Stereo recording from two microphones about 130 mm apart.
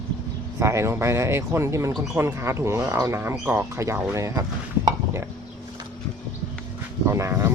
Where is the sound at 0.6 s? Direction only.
20° right (ahead or behind).